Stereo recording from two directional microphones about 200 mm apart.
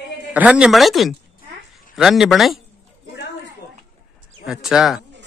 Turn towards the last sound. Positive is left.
turn(degrees=-5)  # may be behind; listen again after turning